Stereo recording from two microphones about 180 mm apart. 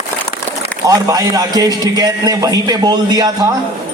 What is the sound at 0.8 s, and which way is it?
A man's voice, 20° right (ahead or behind).